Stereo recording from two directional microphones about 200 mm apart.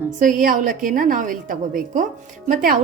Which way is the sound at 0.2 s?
40° right (ahead or behind).